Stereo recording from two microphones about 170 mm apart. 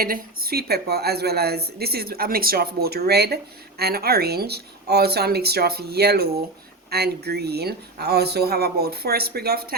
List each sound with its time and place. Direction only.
0.0 s a woman's voice: 60° right (ahead or behind)